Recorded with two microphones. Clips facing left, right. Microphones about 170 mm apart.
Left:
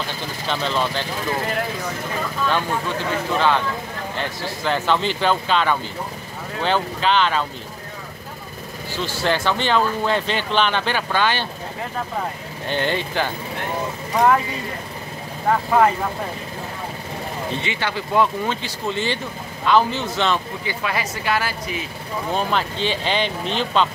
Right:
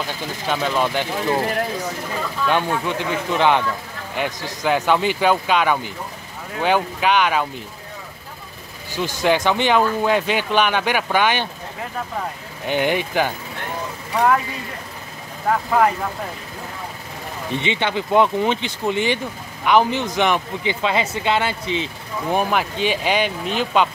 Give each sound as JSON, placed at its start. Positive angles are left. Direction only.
{"t": 0.5, "sound": "speech", "side_deg": -10}
{"t": 2.5, "sound": "speech", "side_deg": -15}
{"t": 8.9, "sound": "speech", "side_deg": -15}
{"t": 12.6, "sound": "speech", "side_deg": -15}
{"t": 14.1, "sound": "speech", "side_deg": 5}
{"t": 15.4, "sound": "speech", "side_deg": 0}
{"t": 17.6, "sound": "speech", "side_deg": -20}
{"t": 22.3, "sound": "speech", "side_deg": -10}